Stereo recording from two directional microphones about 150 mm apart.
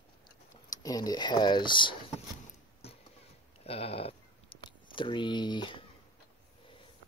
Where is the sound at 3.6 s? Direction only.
40° left (ahead or behind).